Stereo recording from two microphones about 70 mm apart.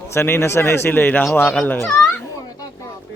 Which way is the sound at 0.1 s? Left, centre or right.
Left.